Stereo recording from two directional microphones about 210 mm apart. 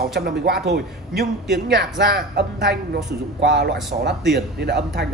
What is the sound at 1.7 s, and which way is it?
Speech, 50° right (ahead or behind).